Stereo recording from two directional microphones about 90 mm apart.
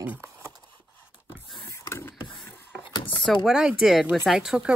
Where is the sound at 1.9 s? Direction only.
25° left (ahead or behind).